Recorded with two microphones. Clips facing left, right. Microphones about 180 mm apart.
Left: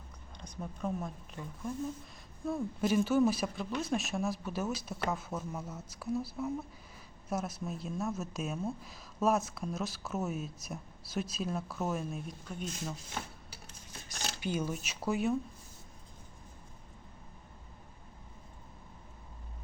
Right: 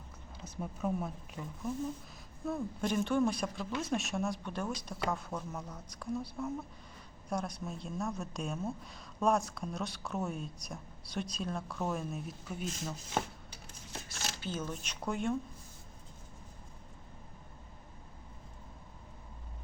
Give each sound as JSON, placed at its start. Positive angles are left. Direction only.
{"t": 0.3, "sound": "a woman's voice", "side_deg": -5}
{"t": 14.4, "sound": "a woman's voice", "side_deg": 10}